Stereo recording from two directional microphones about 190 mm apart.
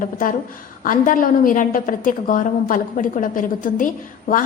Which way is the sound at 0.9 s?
45° left (ahead or behind).